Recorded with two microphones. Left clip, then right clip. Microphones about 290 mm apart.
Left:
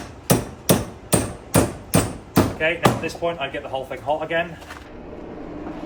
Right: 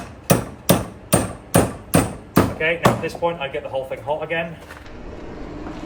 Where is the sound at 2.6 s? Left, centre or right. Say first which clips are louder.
Right 1 dB; left.